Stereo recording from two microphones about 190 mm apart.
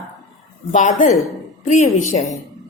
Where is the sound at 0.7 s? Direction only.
40° left (ahead or behind).